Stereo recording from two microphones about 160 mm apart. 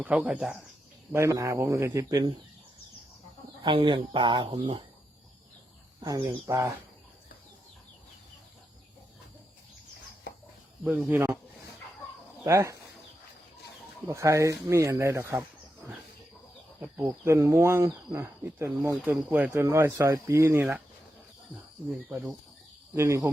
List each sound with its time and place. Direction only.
0.0 s speech: 10° right (ahead or behind)
1.1 s speech: 20° right (ahead or behind)
3.6 s speech: 30° right (ahead or behind)
6.0 s speech: 25° right (ahead or behind)
11.1 s speech: 15° right (ahead or behind)
12.5 s speech: 20° right (ahead or behind)
14.1 s speech: 20° right (ahead or behind)
17.0 s speech: 20° right (ahead or behind)
22.1 s speech: 10° right (ahead or behind)